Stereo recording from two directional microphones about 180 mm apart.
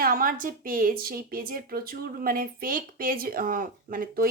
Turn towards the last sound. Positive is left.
turn(degrees=-50)  # may be behind; listen again after turning